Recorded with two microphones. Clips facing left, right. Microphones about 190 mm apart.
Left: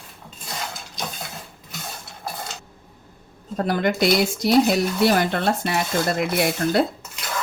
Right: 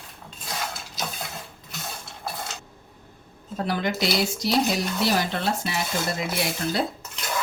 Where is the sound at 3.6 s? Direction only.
50° left (ahead or behind).